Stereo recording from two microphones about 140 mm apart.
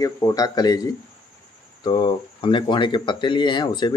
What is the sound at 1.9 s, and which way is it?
Speech, 30° left (ahead or behind).